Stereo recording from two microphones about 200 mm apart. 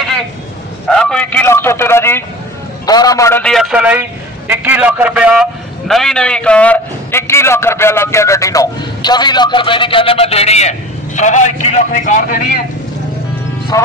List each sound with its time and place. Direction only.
0.8 s a sound: 5° left (ahead or behind)
2.9 s a man's voice: 20° left (ahead or behind); by 12.6 s 45° left (ahead or behind)
13.7 s speech: 15° left (ahead or behind)